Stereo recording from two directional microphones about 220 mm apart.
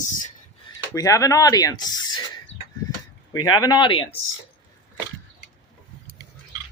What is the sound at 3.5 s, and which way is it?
Speech, 20° left (ahead or behind).